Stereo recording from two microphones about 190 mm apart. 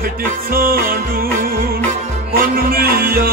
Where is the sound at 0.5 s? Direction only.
50° right (ahead or behind).